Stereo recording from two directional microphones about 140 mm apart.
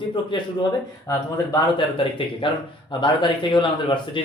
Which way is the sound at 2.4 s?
40° left (ahead or behind).